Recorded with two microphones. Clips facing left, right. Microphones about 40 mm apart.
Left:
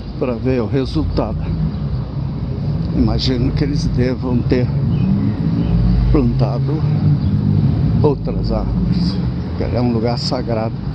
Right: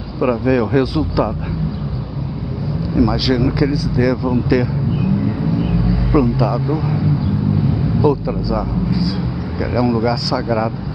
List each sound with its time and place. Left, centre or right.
0.2 s speech: centre
3.0 s speech: centre
5.6 s a sound: centre
6.1 s speech: centre
8.0 s speech: centre